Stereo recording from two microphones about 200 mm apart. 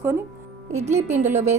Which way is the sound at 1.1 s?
35° right (ahead or behind).